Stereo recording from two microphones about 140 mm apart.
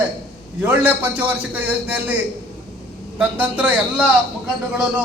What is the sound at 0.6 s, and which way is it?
A man's voice, 10° right (ahead or behind).